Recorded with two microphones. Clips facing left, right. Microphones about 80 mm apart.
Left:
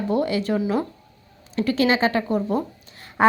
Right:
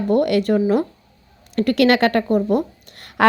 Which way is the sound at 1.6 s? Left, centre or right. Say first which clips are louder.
Right 4 dB; right.